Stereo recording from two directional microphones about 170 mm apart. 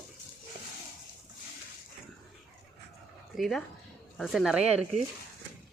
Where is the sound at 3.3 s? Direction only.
Centre (ahead or behind).